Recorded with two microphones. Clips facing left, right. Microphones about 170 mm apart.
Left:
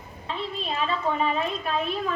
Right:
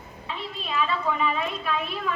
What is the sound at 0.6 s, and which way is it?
A woman's voice, 35° left (ahead or behind).